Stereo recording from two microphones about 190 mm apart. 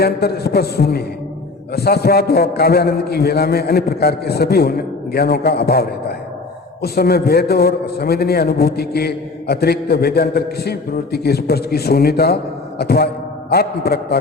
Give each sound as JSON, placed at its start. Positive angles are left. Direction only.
{"t": 0.0, "sound": "a man's voice", "side_deg": 55}